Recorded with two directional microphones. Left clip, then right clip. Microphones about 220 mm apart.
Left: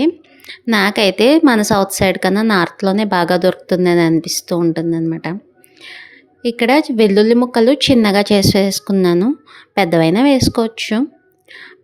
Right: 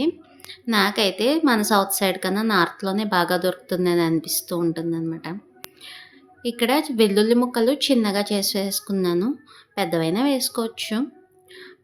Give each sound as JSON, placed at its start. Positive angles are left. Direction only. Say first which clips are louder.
{"t": 0.0, "sound": "a woman's voice", "louder": "left 8 dB", "side_deg": 35}